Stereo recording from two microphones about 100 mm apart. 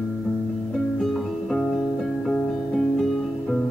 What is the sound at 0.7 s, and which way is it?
Music, 5° left (ahead or behind).